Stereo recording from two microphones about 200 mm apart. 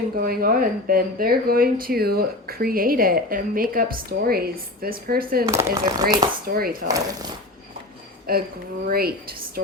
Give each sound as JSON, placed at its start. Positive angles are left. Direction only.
{"t": 0.2, "sound": "speech", "side_deg": -45}
{"t": 5.5, "sound": "speech", "side_deg": -15}
{"t": 6.5, "sound": "speech", "side_deg": -50}
{"t": 6.8, "sound": "speech", "side_deg": -15}
{"t": 8.3, "sound": "speech", "side_deg": -50}